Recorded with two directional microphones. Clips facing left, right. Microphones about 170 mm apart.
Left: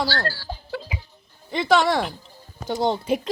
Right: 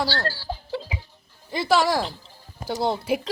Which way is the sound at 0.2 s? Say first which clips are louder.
Even; 30° right (ahead or behind).